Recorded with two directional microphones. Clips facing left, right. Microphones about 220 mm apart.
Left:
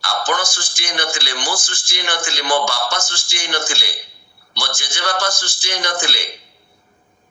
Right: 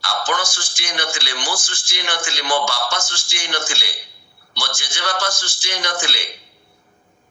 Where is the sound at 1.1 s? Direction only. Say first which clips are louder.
Left 2 dB; 50° left (ahead or behind).